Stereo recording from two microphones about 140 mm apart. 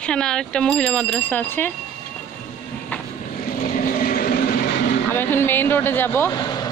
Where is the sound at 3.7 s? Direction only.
90° left.